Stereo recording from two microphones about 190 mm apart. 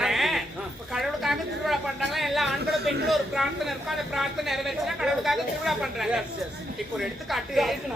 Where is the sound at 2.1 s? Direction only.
Centre (ahead or behind).